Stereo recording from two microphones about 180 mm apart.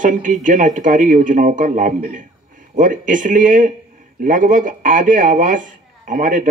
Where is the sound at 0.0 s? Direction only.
45° right (ahead or behind).